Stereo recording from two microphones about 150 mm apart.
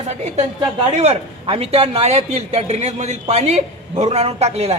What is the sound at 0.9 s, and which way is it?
A man's voice, 45° right (ahead or behind).